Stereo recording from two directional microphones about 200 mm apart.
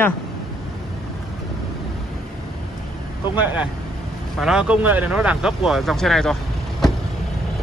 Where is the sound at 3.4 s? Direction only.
5° right (ahead or behind).